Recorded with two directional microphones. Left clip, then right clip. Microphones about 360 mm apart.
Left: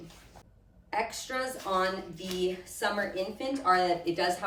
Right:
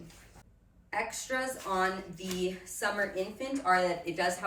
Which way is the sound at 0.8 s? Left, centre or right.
Centre.